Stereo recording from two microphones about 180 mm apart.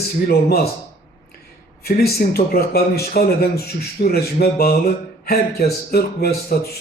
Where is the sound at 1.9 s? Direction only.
60° left (ahead or behind).